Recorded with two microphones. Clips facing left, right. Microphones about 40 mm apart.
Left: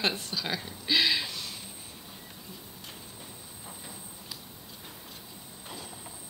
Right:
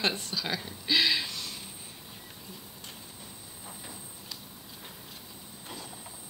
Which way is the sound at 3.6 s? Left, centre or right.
Centre.